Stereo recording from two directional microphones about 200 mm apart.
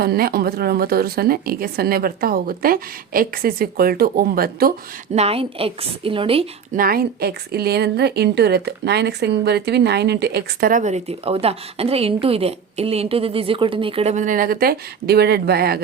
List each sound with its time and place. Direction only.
0.0 s a woman's voice: 50° right (ahead or behind)
5.1 s a woman's voice: 30° right (ahead or behind)
6.7 s a woman's voice: 45° right (ahead or behind)